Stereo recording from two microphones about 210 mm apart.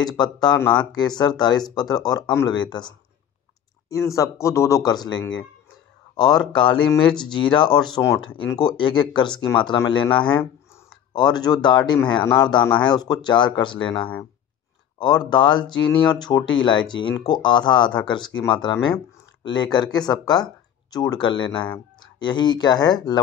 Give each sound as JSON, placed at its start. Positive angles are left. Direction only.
{"t": 0.0, "sound": "speech", "side_deg": 20}
{"t": 4.1, "sound": "speech", "side_deg": 15}
{"t": 9.3, "sound": "speech", "side_deg": 5}
{"t": 9.7, "sound": "speech", "side_deg": 20}
{"t": 10.1, "sound": "speech", "side_deg": 5}
{"t": 11.1, "sound": "speech", "side_deg": 20}